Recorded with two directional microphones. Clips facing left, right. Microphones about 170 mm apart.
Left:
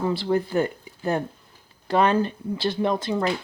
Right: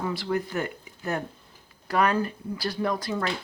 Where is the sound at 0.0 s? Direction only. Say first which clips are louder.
Left 5 dB; 30° left (ahead or behind).